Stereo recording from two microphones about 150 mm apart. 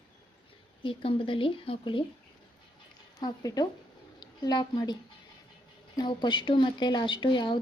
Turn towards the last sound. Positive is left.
turn(degrees=30)  # may be behind; listen again after turning